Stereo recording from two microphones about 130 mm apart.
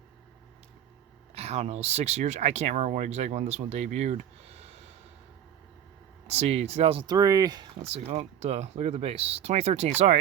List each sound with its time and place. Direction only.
1.4 s speech: 55° right (ahead or behind)
6.2 s speech: 55° right (ahead or behind)
7.1 s speech: 25° right (ahead or behind)
7.8 s speech: 55° right (ahead or behind)